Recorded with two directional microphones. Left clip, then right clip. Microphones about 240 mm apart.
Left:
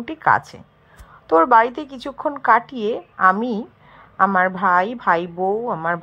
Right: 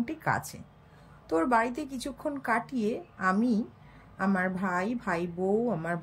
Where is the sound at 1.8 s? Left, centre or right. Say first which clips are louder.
Left 6 dB; centre.